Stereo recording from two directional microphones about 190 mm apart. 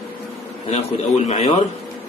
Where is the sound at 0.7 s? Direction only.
35° left (ahead or behind).